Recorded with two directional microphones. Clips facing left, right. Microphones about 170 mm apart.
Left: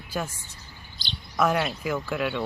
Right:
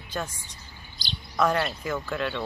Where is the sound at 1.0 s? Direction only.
40° right (ahead or behind).